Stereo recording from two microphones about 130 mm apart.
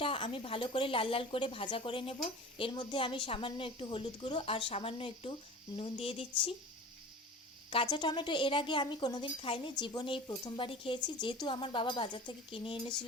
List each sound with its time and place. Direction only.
0.0 s a woman's voice: 45° left (ahead or behind)
7.7 s speech: 40° left (ahead or behind)